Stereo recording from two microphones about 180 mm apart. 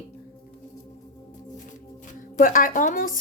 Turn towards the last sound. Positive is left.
turn(degrees=50)  # may be behind; listen again after turning